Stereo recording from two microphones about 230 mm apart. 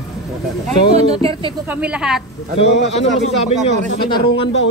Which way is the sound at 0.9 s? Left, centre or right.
Right.